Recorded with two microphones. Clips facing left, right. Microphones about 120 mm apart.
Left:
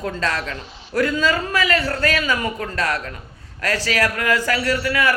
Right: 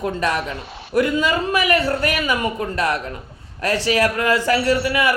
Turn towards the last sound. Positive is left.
turn(degrees=-20)  # may be behind; listen again after turning